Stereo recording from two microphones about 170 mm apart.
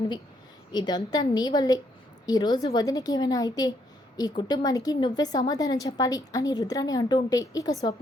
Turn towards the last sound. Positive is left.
turn(degrees=20)  # may be behind; listen again after turning